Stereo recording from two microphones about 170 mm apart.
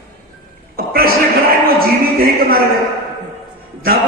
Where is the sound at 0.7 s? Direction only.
60° right (ahead or behind).